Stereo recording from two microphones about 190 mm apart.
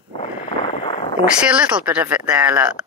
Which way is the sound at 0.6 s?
30° left (ahead or behind).